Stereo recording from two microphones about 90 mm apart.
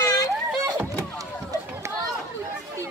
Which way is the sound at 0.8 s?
35° right (ahead or behind).